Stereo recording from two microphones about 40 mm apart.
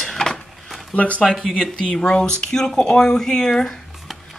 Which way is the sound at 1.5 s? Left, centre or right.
Centre.